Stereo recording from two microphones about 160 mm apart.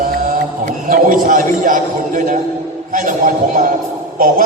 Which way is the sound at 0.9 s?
55° right (ahead or behind).